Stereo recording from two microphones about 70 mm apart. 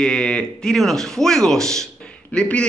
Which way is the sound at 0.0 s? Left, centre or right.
Centre.